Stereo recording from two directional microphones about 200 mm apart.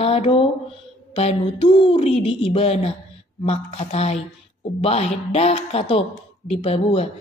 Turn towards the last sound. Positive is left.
turn(degrees=30)  # may be behind; listen again after turning